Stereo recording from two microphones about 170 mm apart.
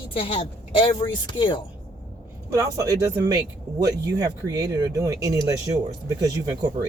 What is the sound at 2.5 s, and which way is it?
Speech, 20° right (ahead or behind).